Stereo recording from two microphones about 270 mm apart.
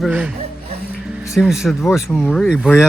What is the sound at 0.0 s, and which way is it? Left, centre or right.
Speech, centre.